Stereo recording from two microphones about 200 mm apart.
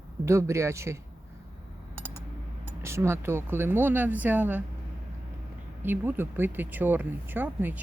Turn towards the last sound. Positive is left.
turn(degrees=-10)  # may be behind; listen again after turning